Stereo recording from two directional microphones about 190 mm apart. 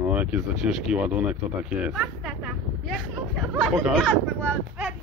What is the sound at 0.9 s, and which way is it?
Speech, 10° right (ahead or behind).